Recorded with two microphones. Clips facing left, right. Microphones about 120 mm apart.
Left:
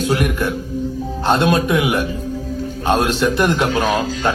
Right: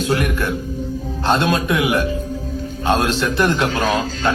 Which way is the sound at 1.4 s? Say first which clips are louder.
Left 2 dB; 15° left (ahead or behind).